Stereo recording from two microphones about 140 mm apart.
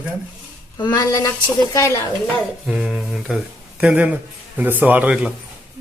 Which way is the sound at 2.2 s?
5° right (ahead or behind).